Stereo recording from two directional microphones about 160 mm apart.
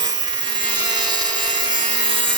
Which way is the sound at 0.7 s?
25° right (ahead or behind).